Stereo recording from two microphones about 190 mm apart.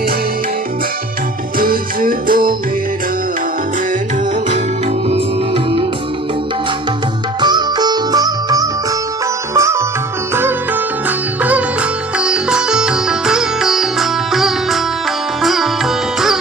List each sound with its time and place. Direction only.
1.6 s music: 50° right (ahead or behind)
5.1 s music: 30° right (ahead or behind)
7.3 s music: 20° right (ahead or behind)
9.5 s sitar: 15° right (ahead or behind)
11.1 s sitar: 10° right (ahead or behind)